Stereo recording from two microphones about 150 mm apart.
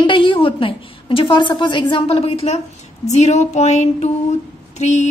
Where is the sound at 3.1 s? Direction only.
50° left (ahead or behind).